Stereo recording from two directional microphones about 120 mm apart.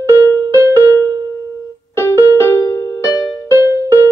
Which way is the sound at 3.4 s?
20° right (ahead or behind).